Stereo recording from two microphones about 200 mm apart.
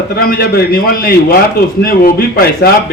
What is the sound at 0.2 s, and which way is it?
A man's voice, 50° left (ahead or behind).